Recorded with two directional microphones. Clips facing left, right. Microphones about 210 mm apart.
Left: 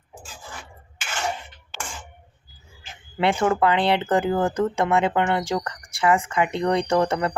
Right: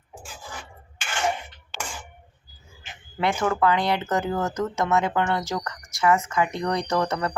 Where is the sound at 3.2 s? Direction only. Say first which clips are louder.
Left 3 dB; 30° left (ahead or behind).